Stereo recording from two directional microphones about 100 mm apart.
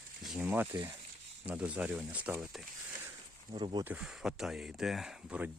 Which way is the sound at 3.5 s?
45° right (ahead or behind).